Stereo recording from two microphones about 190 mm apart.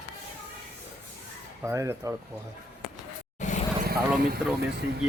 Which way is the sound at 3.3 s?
40° left (ahead or behind).